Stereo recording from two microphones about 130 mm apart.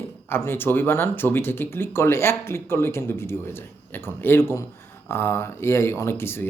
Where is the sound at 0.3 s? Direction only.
15° left (ahead or behind).